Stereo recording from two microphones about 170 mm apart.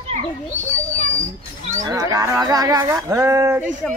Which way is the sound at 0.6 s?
45° right (ahead or behind).